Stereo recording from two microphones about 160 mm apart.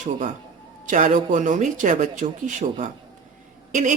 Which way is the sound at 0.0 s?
50° right (ahead or behind).